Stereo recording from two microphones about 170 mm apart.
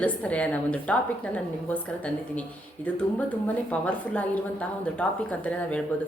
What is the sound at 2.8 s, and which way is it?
A woman's voice, 10° left (ahead or behind).